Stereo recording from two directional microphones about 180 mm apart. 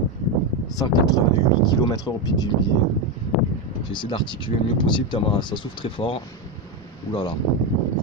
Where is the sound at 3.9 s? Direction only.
25° left (ahead or behind).